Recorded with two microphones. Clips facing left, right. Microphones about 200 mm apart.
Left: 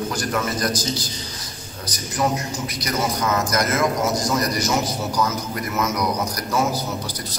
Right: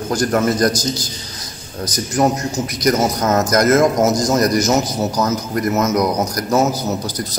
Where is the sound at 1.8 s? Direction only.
45° right (ahead or behind).